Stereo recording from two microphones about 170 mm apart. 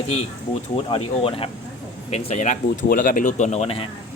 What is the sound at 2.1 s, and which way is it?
Speech, 40° left (ahead or behind).